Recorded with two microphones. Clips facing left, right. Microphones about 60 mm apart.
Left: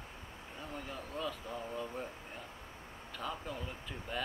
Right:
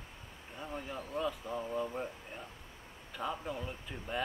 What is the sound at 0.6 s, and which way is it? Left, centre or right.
Speech, centre.